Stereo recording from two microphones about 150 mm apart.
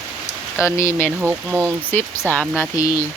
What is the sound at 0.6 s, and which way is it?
Speech, 20° left (ahead or behind).